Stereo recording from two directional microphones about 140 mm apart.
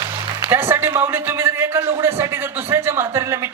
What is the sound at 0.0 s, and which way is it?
A man's voice, 20° right (ahead or behind).